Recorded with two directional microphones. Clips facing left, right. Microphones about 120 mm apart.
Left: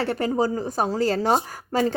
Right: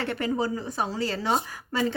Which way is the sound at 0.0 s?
35° left (ahead or behind).